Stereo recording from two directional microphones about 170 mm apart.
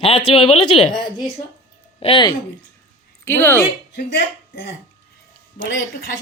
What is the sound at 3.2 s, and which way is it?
Speech, 15° left (ahead or behind).